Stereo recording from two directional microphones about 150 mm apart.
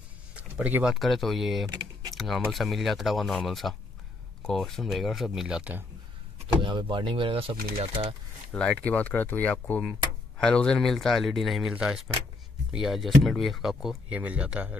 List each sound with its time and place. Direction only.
0.4 s speech: 10° right (ahead or behind)
6.4 s speech: 35° right (ahead or behind)
8.5 s speech: 5° left (ahead or behind); by 14.8 s 10° right (ahead or behind)